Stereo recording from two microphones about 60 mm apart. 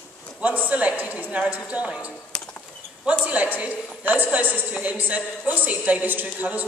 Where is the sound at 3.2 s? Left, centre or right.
Right.